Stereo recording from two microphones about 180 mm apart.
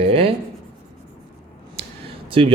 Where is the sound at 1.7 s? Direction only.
30° right (ahead or behind).